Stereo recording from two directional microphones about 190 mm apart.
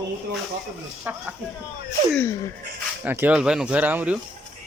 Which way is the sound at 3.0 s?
10° right (ahead or behind).